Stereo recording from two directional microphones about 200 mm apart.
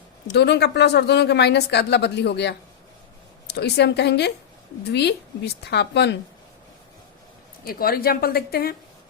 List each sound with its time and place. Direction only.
0.3 s speech: 55° left (ahead or behind)
7.6 s a woman's voice: 50° left (ahead or behind)